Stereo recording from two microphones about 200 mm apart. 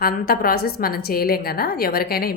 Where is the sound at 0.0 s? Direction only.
50° left (ahead or behind).